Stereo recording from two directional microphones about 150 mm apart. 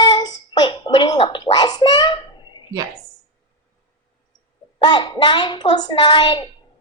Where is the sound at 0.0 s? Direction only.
30° left (ahead or behind).